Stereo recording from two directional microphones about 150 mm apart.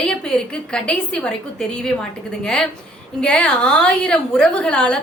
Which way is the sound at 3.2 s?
10° left (ahead or behind).